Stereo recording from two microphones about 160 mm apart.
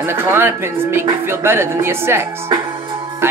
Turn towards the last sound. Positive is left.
turn(degrees=-15)  # may be behind; listen again after turning